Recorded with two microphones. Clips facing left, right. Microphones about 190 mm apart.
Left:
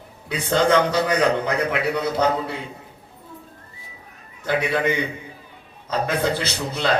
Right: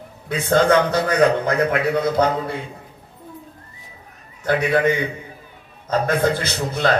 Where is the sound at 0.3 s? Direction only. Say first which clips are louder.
Right 3 dB; 50° right (ahead or behind).